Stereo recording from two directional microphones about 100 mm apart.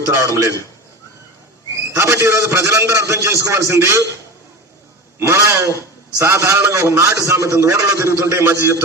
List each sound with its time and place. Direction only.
0.2 s a man's voice: 35° right (ahead or behind)
2.0 s a man's voice: 25° right (ahead or behind)
5.3 s a man's voice: 30° right (ahead or behind)